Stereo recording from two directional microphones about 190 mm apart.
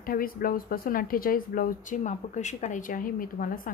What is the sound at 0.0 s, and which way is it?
A woman's voice, 50° left (ahead or behind).